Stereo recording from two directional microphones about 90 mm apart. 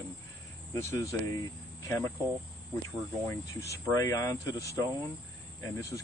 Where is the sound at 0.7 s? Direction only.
35° left (ahead or behind).